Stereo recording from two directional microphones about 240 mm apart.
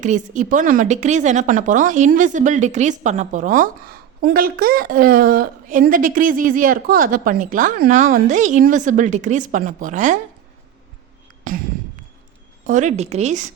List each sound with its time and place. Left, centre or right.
0.0 s a woman's voice: right
12.6 s a woman's voice: right